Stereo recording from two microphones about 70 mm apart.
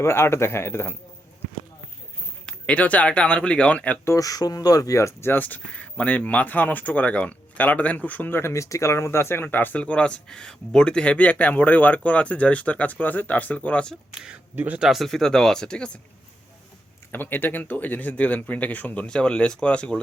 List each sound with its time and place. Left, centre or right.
0.0 s speech: left
2.5 s speech: centre
4.0 s speech: left
4.3 s speech: left
5.3 s speech: left
14.5 s speech: right
14.8 s speech: centre
17.1 s speech: left
19.0 s speech: centre